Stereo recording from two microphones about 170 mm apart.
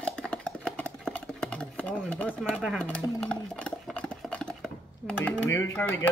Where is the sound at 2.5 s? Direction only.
5° right (ahead or behind).